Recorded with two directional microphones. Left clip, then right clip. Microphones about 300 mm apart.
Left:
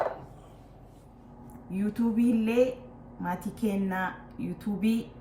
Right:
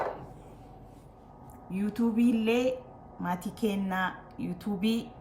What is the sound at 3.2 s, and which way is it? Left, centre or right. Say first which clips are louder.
Speech: right 1 dB; centre.